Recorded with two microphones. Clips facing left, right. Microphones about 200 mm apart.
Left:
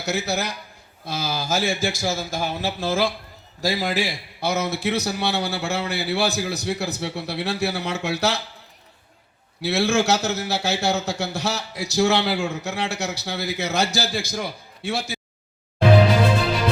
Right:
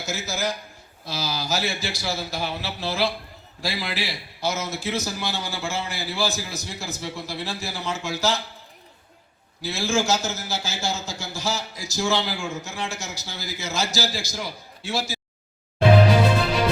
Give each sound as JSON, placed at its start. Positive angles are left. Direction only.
{"t": 0.0, "sound": "a man's voice", "side_deg": 65}
{"t": 9.6, "sound": "a man's voice", "side_deg": 65}